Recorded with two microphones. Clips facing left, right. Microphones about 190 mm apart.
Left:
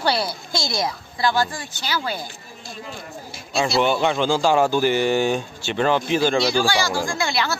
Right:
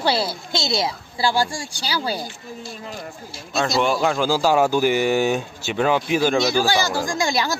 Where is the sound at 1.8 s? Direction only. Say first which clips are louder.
Right 1 dB; 35° right (ahead or behind).